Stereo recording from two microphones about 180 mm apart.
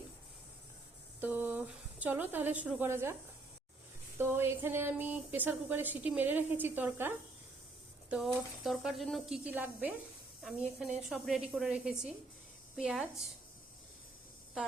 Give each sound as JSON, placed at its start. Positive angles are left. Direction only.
{"t": 1.2, "sound": "speech", "side_deg": -10}
{"t": 4.2, "sound": "speech", "side_deg": -15}
{"t": 8.1, "sound": "speech", "side_deg": 0}